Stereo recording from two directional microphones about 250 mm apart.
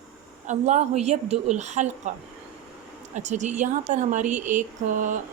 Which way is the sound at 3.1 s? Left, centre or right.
Right.